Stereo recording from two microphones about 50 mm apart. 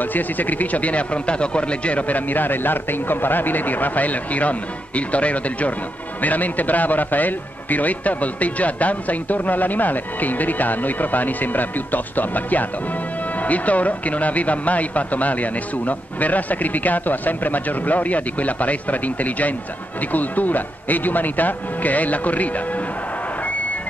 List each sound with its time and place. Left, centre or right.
0.0 s a man's voice: left